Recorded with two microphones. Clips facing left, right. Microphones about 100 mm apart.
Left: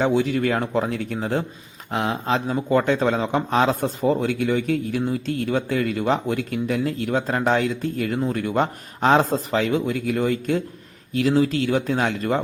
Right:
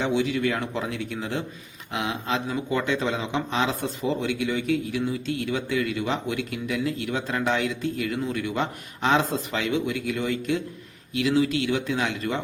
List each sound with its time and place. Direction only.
0.0 s speech: 40° left (ahead or behind)